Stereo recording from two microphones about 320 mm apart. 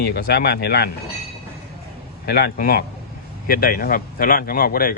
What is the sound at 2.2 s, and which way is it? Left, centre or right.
Speech, left.